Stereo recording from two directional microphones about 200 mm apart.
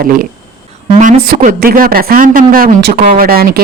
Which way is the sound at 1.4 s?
45° right (ahead or behind).